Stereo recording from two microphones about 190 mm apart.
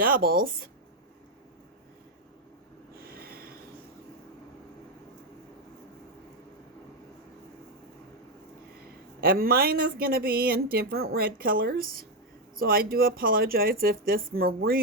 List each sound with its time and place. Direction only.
0.0 s a woman's voice: 50° right (ahead or behind)
3.2 s snort: 55° right (ahead or behind)
9.2 s a woman's voice: 50° right (ahead or behind)